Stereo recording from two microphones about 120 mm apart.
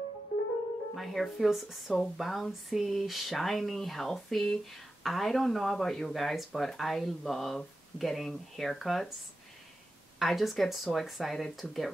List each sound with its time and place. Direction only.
0.9 s speech: centre (ahead or behind)
10.1 s speech: centre (ahead or behind)